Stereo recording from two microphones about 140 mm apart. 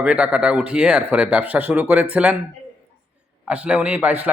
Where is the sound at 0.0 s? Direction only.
5° right (ahead or behind).